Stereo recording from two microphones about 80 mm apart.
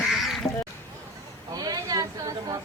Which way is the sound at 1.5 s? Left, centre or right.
Right.